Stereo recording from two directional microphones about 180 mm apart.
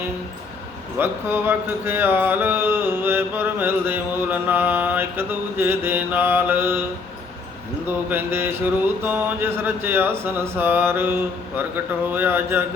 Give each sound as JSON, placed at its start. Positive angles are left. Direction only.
{"t": 0.9, "sound": "speech", "side_deg": -10}
{"t": 7.9, "sound": "speech", "side_deg": -10}